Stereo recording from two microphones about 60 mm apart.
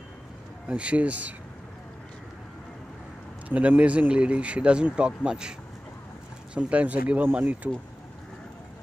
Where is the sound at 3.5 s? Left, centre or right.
Right.